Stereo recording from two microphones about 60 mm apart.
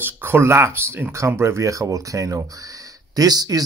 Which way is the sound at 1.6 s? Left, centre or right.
Right.